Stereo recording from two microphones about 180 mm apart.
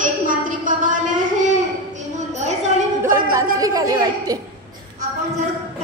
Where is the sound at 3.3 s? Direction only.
20° right (ahead or behind).